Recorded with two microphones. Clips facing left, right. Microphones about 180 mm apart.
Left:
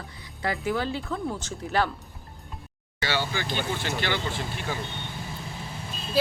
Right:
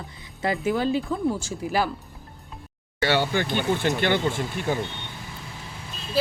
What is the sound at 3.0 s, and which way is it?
Speech, 55° right (ahead or behind).